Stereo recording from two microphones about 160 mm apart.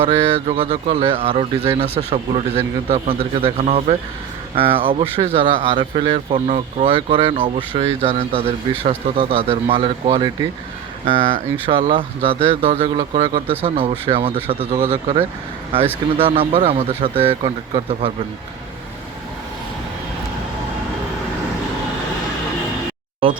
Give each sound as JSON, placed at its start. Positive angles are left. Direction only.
{"t": 0.0, "sound": "speech", "side_deg": -40}
{"t": 11.7, "sound": "speech", "side_deg": -35}